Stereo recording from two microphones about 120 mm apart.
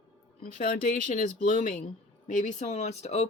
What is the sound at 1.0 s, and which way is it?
Speech, 90° left.